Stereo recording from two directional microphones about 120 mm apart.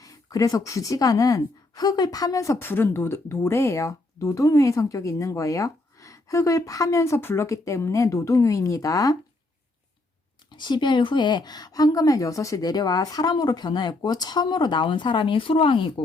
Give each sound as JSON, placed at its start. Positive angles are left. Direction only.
{"t": 0.0, "sound": "speech", "side_deg": 30}
{"t": 10.6, "sound": "speech", "side_deg": 40}